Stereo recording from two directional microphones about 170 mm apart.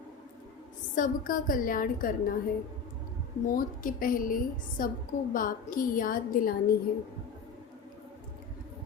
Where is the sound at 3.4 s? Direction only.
55° left (ahead or behind).